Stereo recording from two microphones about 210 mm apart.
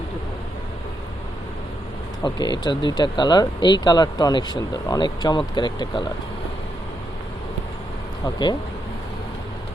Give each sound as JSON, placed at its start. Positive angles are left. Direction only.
{"t": 2.2, "sound": "speech", "side_deg": 20}